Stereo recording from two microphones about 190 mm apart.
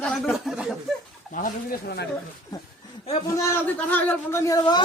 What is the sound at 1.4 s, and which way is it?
Speech, 45° left (ahead or behind).